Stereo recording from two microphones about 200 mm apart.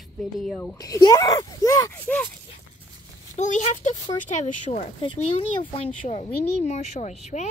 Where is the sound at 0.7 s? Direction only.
20° left (ahead or behind).